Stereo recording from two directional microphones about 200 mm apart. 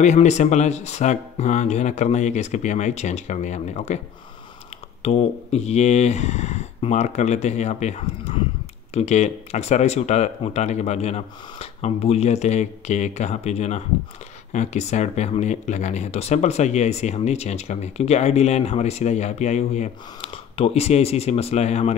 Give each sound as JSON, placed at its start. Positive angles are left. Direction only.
{"t": 0.0, "sound": "speech", "side_deg": 35}
{"t": 5.0, "sound": "speech", "side_deg": 30}